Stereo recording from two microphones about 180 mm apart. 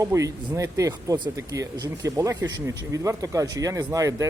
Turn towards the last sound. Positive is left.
turn(degrees=-20)  # may be behind; listen again after turning